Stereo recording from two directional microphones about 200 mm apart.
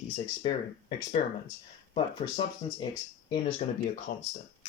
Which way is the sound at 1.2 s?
35° left (ahead or behind).